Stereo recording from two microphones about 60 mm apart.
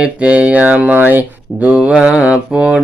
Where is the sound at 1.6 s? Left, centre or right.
Right.